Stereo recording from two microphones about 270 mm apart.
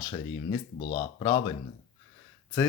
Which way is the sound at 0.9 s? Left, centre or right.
Centre.